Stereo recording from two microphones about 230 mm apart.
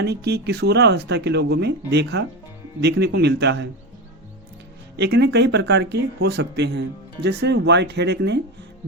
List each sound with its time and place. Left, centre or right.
0.0 s speech: right
4.9 s speech: right